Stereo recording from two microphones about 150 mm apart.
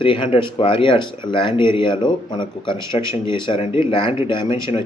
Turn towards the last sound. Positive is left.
turn(degrees=35)  # may be behind; listen again after turning